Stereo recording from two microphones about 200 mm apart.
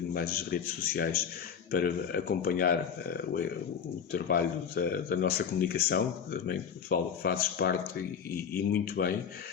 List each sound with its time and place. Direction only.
0.1 s speech: 50° left (ahead or behind)
8.7 s speech: 50° left (ahead or behind)